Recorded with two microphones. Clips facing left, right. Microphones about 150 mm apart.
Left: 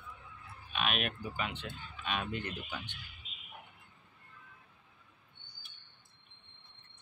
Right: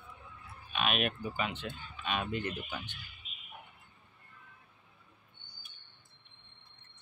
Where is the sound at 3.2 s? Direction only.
90° left.